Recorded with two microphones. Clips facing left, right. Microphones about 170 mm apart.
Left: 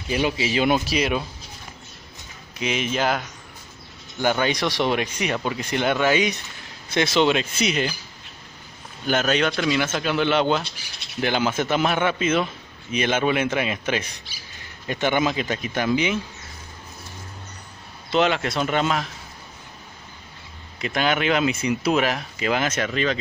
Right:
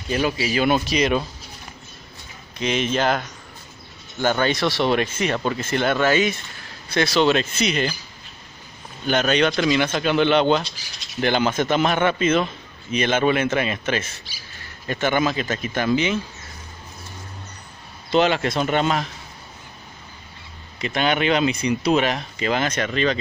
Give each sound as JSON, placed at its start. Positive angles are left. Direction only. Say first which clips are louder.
{"t": 0.1, "sound": "speech", "louder": "right 1 dB", "side_deg": 20}
{"t": 0.7, "sound": "speech", "louder": "right 2 dB", "side_deg": 5}
{"t": 2.6, "sound": "speech", "louder": "right 2 dB", "side_deg": 10}
{"t": 9.0, "sound": "speech", "louder": "right 2 dB", "side_deg": 5}
{"t": 18.1, "sound": "speech", "louder": "right 2 dB", "side_deg": 0}
{"t": 20.8, "sound": "speech", "louder": "right 1 dB", "side_deg": 0}